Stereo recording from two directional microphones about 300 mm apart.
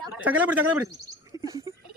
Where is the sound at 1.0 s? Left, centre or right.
Centre.